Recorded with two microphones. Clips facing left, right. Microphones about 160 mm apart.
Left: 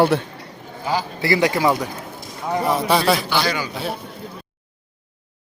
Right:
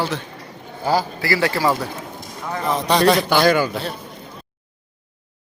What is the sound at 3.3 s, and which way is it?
Speech, 50° right (ahead or behind).